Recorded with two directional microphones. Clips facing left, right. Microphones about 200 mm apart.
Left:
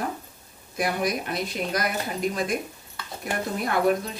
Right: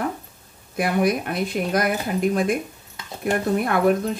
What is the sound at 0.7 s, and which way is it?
Speech, 55° right (ahead or behind).